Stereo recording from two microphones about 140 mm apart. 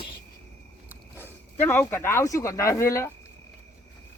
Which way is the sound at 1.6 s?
15° left (ahead or behind).